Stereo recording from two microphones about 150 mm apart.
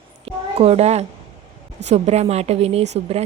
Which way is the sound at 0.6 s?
45° right (ahead or behind).